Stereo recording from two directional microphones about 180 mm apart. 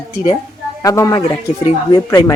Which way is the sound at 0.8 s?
20° left (ahead or behind).